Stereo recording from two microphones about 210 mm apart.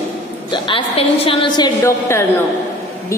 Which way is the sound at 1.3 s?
20° left (ahead or behind).